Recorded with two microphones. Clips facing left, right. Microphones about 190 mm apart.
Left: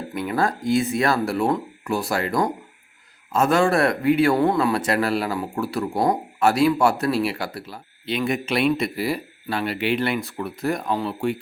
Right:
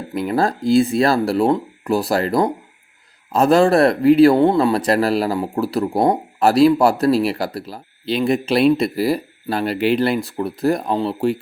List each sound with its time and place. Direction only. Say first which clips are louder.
0.1 s speech: right 5 dB; 35° right (ahead or behind)